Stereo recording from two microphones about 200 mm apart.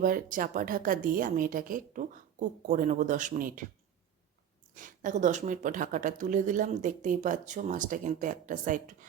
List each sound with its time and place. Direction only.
0.0 s a woman's voice: 40° right (ahead or behind)
4.7 s speech: 40° right (ahead or behind)